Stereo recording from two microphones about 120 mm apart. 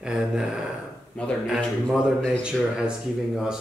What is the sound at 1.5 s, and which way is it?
Speech, 5° right (ahead or behind).